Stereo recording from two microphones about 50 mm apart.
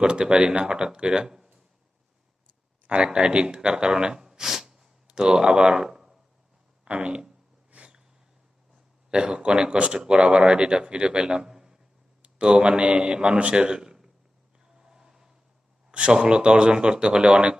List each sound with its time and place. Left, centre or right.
0.0 s speech: centre
2.8 s speech: centre
6.8 s speech: right
7.7 s a sound: right
9.0 s a man's voice: centre
14.6 s a sound: centre
15.9 s speech: right